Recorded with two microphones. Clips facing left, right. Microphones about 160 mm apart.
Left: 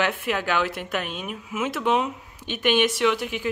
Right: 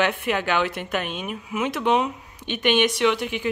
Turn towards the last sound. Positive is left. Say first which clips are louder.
# right 1 dB
turn(degrees=5)  # may be behind; listen again after turning